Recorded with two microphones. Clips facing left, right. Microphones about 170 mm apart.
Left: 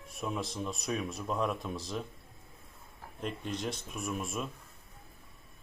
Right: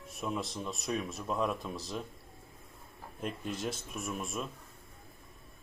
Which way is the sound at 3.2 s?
5° right (ahead or behind).